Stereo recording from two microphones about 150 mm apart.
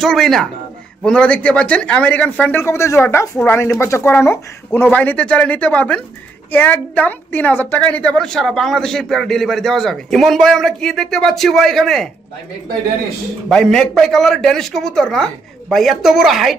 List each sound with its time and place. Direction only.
0.0 s a woman's voice: centre (ahead or behind)
13.5 s a woman's voice: 5° left (ahead or behind)